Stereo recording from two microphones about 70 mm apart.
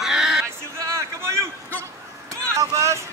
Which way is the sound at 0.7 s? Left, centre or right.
Right.